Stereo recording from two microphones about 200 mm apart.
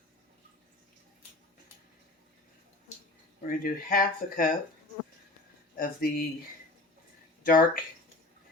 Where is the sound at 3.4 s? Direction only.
45° left (ahead or behind).